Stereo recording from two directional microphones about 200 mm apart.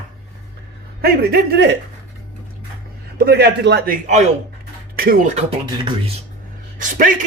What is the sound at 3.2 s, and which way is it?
Speech, 55° right (ahead or behind).